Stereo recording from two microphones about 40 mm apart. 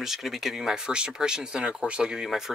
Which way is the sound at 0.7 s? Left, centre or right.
Centre.